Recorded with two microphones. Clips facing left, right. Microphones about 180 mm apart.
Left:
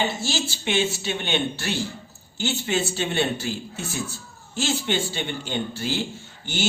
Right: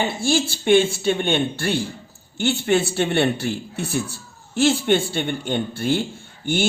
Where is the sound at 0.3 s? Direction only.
50° right (ahead or behind).